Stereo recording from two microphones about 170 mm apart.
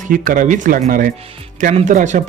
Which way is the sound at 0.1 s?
55° right (ahead or behind).